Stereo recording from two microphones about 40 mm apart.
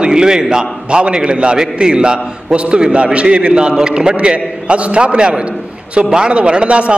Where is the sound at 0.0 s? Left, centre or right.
Centre.